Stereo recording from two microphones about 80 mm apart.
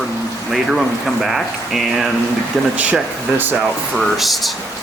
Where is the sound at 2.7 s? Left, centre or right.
Centre.